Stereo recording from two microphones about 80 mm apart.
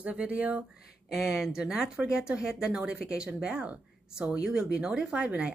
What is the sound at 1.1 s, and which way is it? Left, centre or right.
Speech, centre.